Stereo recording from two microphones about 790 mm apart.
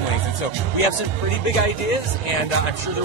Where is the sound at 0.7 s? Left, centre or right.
Left.